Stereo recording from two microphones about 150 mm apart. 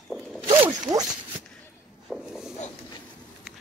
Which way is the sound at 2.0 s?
5° right (ahead or behind).